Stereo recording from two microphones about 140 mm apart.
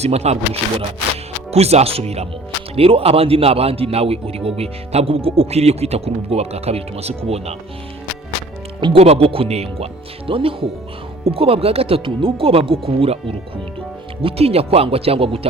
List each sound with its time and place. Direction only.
0.0 s speech: 50° right (ahead or behind)
8.8 s speech: 45° right (ahead or behind)